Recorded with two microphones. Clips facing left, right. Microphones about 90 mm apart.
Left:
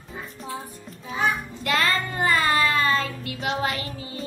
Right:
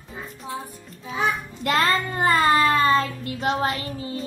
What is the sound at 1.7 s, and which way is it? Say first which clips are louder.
Child singing: right 2 dB; 30° right (ahead or behind).